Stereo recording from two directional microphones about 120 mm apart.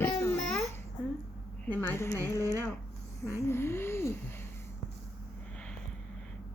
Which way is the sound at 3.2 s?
20° left (ahead or behind).